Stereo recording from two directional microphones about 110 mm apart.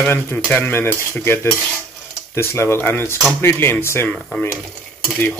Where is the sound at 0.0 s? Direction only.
20° left (ahead or behind).